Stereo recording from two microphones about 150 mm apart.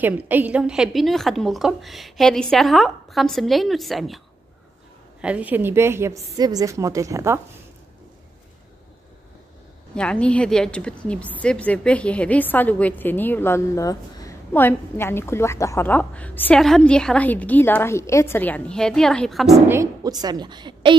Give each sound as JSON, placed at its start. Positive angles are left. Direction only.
{"t": 0.0, "sound": "a woman's voice", "side_deg": -10}
{"t": 5.2, "sound": "a woman's voice", "side_deg": -10}
{"t": 9.9, "sound": "a woman's voice", "side_deg": 5}
{"t": 19.7, "sound": "a woman's voice", "side_deg": -25}